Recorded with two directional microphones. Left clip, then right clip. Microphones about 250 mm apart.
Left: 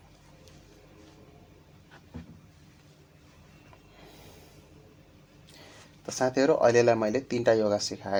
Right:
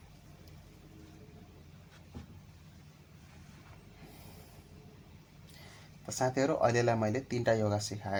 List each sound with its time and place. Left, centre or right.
6.1 s speech: centre